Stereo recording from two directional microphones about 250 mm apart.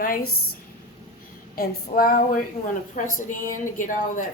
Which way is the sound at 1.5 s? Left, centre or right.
Left.